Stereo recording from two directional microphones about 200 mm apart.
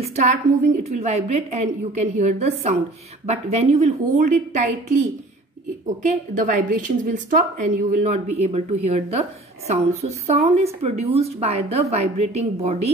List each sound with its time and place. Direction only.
0.0 s speech: 35° right (ahead or behind)
6.0 s speech: 40° right (ahead or behind)